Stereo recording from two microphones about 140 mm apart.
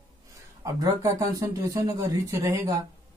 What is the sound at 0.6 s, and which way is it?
Speech, 25° right (ahead or behind).